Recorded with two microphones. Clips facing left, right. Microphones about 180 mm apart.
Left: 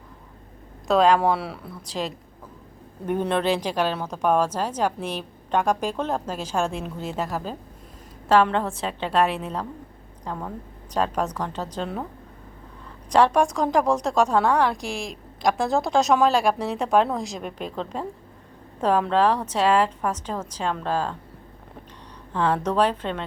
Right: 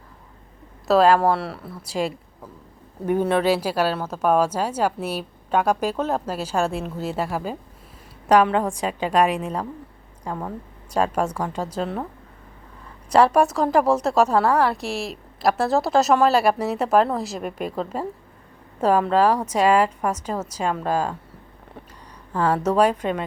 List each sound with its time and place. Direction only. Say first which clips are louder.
0.9 s a woman's voice: right 2 dB; 5° right (ahead or behind)
13.1 s a woman's voice: right 2 dB; 5° right (ahead or behind)
22.3 s a woman's voice: right 2 dB; 5° right (ahead or behind)